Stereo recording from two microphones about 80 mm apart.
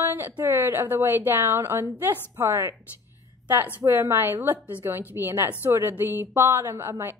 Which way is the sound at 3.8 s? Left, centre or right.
Right.